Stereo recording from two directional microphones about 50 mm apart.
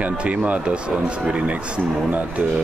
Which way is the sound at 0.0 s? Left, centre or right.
Right.